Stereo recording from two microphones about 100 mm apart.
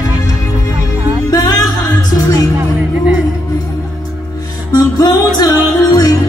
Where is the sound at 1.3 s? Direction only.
40° left (ahead or behind).